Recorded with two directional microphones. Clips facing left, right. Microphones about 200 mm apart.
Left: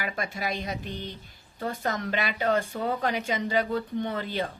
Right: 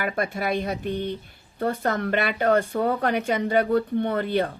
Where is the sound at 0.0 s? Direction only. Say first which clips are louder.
Right 6 dB; 55° right (ahead or behind).